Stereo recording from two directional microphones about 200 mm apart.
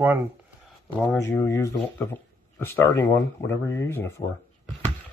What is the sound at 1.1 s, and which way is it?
Speech, 15° left (ahead or behind).